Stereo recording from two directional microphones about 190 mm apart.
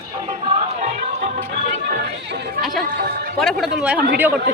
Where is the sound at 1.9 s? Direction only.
60° right (ahead or behind).